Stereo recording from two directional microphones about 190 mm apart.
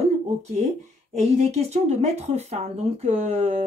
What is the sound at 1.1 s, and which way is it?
Speech, 35° right (ahead or behind).